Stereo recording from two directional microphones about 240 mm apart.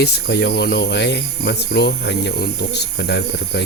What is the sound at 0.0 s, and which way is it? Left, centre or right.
Speech, left.